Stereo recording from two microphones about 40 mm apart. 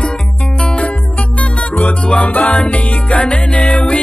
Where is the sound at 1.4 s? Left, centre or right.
Left.